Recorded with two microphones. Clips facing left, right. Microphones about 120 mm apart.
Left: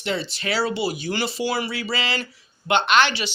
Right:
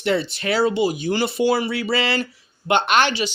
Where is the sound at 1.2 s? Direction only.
50° right (ahead or behind).